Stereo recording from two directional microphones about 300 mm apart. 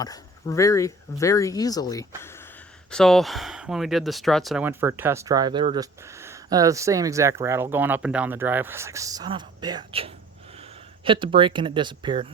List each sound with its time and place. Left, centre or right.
0.0 s speech: centre